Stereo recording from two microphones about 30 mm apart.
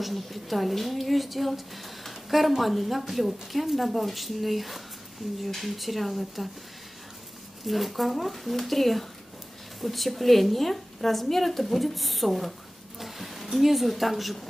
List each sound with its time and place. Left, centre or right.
0.0 s a woman's voice: centre
7.6 s a woman's voice: centre